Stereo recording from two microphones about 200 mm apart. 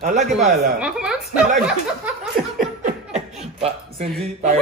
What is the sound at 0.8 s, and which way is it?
Speech, 5° right (ahead or behind).